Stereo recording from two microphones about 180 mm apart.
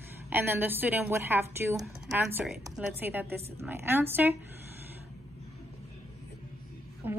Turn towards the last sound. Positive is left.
turn(degrees=-10)  # may be behind; listen again after turning